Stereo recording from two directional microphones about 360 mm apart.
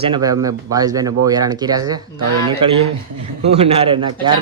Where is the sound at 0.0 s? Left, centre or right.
Centre.